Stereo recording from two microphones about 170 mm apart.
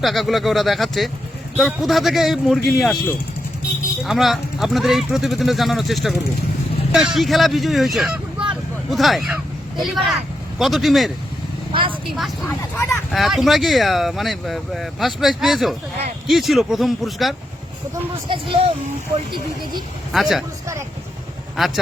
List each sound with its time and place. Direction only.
0.0 s speech: centre (ahead or behind)
4.0 s speech: centre (ahead or behind)
11.7 s speech: 30° right (ahead or behind)
12.1 s speech: centre (ahead or behind)
12.7 s speech: 15° left (ahead or behind)
13.1 s speech: centre (ahead or behind)
18.3 s speech: 35° right (ahead or behind)
20.1 s speech: centre (ahead or behind)